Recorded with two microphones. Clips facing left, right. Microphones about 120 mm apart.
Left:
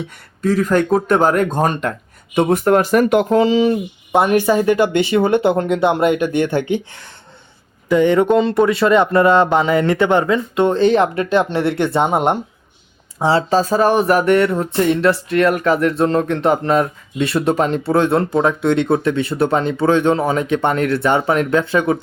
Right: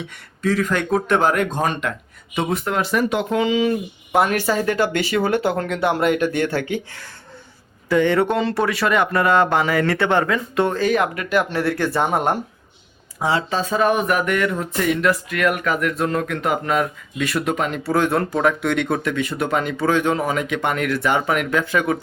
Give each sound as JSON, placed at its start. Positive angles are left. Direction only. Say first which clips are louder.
{"t": 0.4, "sound": "speech", "louder": "left 5 dB", "side_deg": 40}
{"t": 3.2, "sound": "speech", "louder": "left 5 dB", "side_deg": 35}